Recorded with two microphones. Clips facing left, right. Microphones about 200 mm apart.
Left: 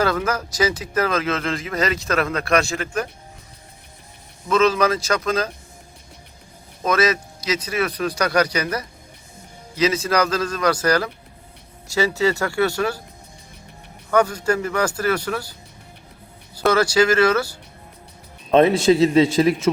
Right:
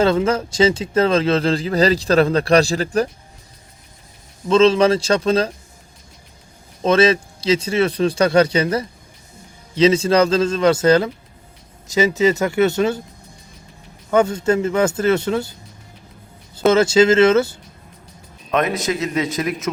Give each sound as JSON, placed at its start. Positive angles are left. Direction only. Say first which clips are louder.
{"t": 0.0, "sound": "speech", "louder": "right 5 dB", "side_deg": -25}
{"t": 4.4, "sound": "speech", "louder": "right 5 dB", "side_deg": -25}
{"t": 6.8, "sound": "speech", "louder": "right 5 dB", "side_deg": -25}
{"t": 14.1, "sound": "speech", "louder": "right 3 dB", "side_deg": -25}
{"t": 16.6, "sound": "speech", "louder": "right 4 dB", "side_deg": -20}
{"t": 18.5, "sound": "a man's voice", "louder": "left 6 dB", "side_deg": 30}